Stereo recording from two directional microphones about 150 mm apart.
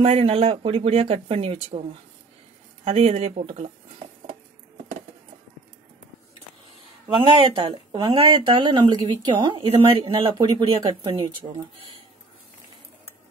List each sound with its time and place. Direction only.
0.0 s speech: 40° right (ahead or behind)
7.1 s speech: 35° right (ahead or behind)